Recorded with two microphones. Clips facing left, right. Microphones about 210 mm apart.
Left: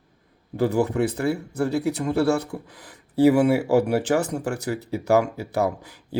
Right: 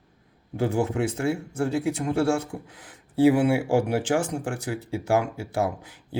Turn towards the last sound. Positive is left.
turn(degrees=40)  # may be behind; listen again after turning